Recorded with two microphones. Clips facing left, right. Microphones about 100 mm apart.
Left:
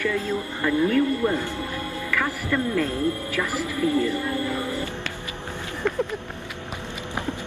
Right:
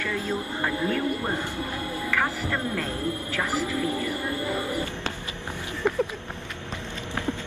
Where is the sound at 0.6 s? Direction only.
25° right (ahead or behind).